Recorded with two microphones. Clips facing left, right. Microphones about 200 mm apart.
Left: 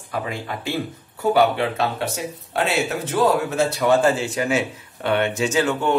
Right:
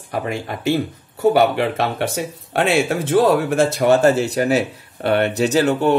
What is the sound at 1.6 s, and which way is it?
Speech, 70° right (ahead or behind).